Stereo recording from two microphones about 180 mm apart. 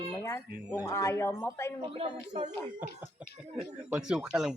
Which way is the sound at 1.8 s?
30° right (ahead or behind).